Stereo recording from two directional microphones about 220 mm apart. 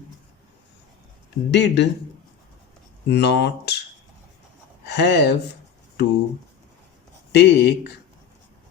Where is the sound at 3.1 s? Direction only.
50° left (ahead or behind).